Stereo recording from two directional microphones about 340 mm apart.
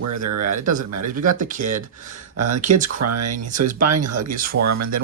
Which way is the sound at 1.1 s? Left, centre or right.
Right.